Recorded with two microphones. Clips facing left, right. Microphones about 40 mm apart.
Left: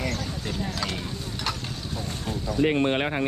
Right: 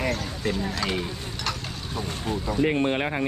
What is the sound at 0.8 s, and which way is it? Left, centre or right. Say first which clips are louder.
Speech: right 3 dB; centre.